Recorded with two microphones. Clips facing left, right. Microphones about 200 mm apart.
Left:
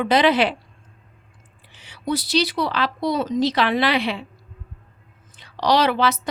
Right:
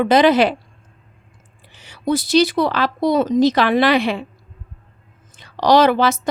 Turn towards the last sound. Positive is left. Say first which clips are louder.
# right 5 dB
turn(degrees=-45)  # may be behind; listen again after turning